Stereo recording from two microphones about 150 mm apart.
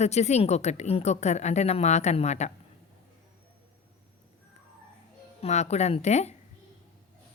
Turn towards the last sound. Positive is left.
turn(degrees=50)  # may be behind; listen again after turning